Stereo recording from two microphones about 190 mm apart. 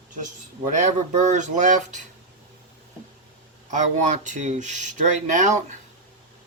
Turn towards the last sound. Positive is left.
turn(degrees=-40)  # may be behind; listen again after turning